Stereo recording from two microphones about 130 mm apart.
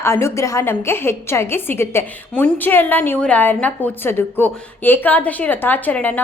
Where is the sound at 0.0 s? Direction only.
20° left (ahead or behind).